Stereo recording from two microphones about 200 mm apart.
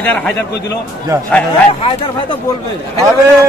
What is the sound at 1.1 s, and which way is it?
Speech, 15° right (ahead or behind).